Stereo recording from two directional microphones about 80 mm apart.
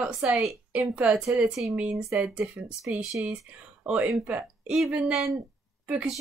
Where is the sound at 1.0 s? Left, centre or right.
Centre.